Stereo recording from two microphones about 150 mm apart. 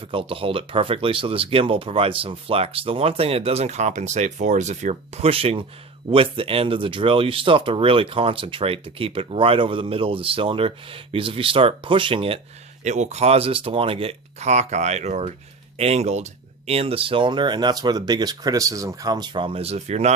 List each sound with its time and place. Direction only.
0.0 s speech: 35° right (ahead or behind)
12.8 s speech: 50° right (ahead or behind)